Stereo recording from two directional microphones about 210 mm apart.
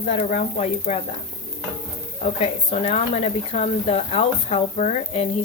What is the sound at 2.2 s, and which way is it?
Speech, 30° left (ahead or behind).